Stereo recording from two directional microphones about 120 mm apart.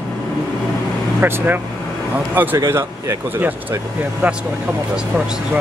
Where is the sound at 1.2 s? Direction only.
15° right (ahead or behind).